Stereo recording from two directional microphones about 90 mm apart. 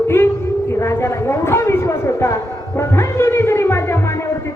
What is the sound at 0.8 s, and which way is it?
A woman's voice, 30° left (ahead or behind).